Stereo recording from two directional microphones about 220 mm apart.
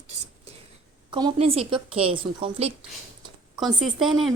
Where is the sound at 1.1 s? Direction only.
25° right (ahead or behind).